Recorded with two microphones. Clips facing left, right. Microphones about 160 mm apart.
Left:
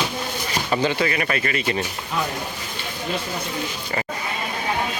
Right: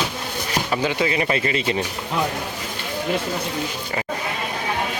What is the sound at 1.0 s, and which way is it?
Speech, 20° right (ahead or behind).